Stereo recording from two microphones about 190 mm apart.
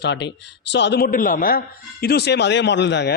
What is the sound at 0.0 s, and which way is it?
Speech, 65° left (ahead or behind).